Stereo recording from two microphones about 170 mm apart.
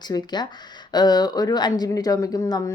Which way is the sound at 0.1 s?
25° left (ahead or behind).